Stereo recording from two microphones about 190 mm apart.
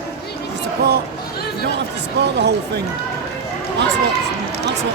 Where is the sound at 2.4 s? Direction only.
60° right (ahead or behind).